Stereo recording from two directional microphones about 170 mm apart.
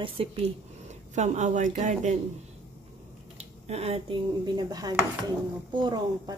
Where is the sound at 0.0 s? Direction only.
35° right (ahead or behind).